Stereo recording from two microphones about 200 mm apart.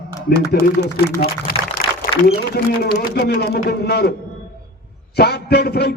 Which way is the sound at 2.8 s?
50° left (ahead or behind).